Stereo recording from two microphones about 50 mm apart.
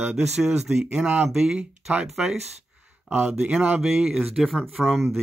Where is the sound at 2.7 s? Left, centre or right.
Right.